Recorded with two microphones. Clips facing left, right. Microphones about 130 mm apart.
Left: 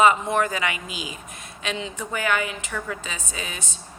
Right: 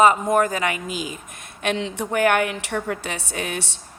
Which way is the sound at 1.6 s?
65° right (ahead or behind).